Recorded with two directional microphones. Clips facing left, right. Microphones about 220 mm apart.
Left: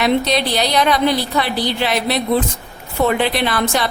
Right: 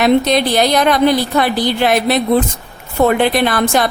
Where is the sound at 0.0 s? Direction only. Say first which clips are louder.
Right 5 dB; 50° right (ahead or behind).